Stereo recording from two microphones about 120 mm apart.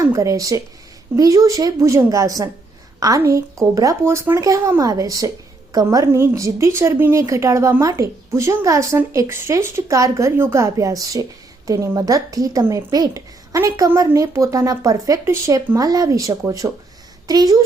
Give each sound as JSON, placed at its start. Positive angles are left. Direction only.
{"t": 0.0, "sound": "a woman's voice", "side_deg": -25}